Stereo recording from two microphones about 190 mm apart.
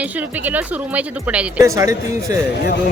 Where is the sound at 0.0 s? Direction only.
10° right (ahead or behind).